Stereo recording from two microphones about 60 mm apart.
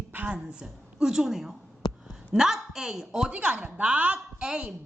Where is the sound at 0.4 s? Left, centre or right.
Centre.